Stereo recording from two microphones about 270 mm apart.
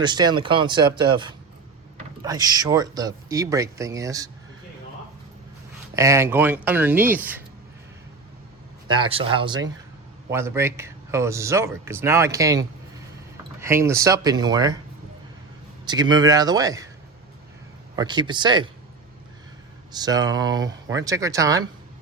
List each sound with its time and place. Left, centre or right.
0.0 s a man's voice: centre
6.0 s a man's voice: centre
8.9 s a man's voice: centre
15.9 s a man's voice: centre
17.9 s a man's voice: centre
19.9 s a man's voice: centre